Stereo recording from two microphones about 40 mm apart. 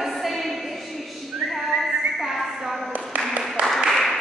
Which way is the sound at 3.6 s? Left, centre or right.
Right.